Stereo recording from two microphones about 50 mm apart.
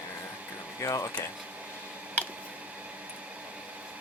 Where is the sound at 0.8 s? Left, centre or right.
Left.